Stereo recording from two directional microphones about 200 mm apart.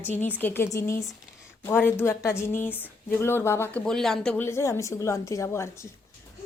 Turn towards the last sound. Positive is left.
turn(degrees=15)  # may be behind; listen again after turning